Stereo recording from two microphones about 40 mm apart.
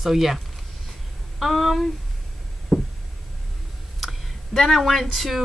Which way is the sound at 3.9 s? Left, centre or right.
Centre.